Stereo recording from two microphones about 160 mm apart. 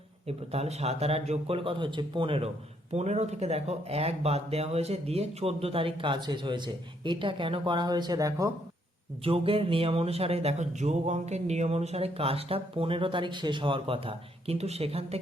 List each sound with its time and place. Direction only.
0.3 s speech: 40° right (ahead or behind); by 8.5 s 20° right (ahead or behind)
9.2 s speech: 35° right (ahead or behind)